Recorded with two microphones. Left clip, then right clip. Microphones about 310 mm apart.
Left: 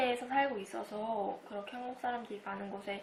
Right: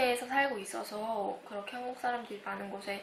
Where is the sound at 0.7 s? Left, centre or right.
Centre.